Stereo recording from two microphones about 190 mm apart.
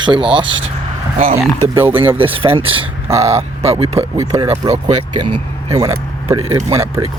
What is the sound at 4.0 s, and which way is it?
Speech, 15° right (ahead or behind).